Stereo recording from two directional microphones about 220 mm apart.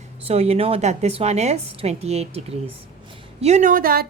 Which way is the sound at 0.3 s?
25° right (ahead or behind).